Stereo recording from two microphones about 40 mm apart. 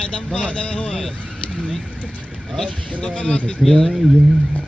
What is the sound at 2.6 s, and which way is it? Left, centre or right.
Speech, left.